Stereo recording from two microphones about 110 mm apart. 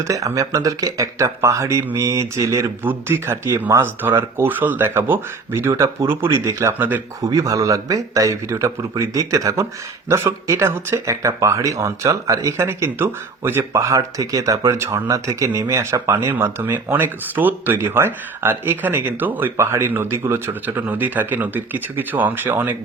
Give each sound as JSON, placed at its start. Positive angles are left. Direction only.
{"t": 0.0, "sound": "speech", "side_deg": -30}
{"t": 2.8, "sound": "speech", "side_deg": -20}
{"t": 7.2, "sound": "speech", "side_deg": -30}